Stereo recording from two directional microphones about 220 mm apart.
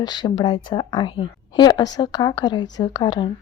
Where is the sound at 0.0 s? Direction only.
20° left (ahead or behind).